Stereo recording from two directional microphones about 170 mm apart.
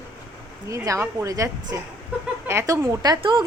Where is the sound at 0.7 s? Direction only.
20° right (ahead or behind).